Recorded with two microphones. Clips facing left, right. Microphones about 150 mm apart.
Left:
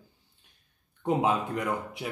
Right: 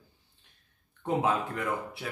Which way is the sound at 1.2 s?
20° left (ahead or behind).